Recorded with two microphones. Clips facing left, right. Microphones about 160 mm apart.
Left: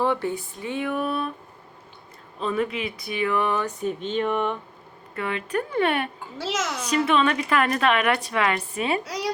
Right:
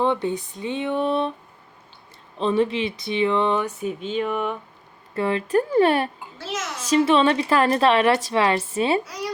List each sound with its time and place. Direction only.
0.0 s a sound: 20° right (ahead or behind)
2.4 s a sound: 30° right (ahead or behind)
3.7 s speech: 5° right (ahead or behind)
5.1 s a woman's voice: 30° right (ahead or behind)
6.4 s a woman's voice: 90° left
6.9 s a woman's voice: 30° right (ahead or behind)
9.0 s speech: 90° left